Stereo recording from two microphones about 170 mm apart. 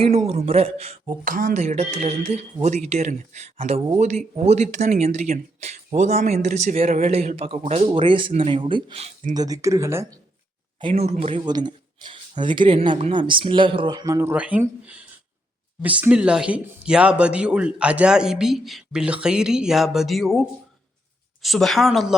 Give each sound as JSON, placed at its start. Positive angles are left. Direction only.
{"t": 0.3, "sound": "speech", "side_deg": -35}
{"t": 1.2, "sound": "speech", "side_deg": -50}
{"t": 9.3, "sound": "speech", "side_deg": -20}
{"t": 10.8, "sound": "speech", "side_deg": -35}
{"t": 21.4, "sound": "speech", "side_deg": 0}